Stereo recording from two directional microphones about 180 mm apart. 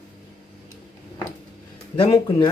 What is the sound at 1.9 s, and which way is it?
Speech, 30° left (ahead or behind).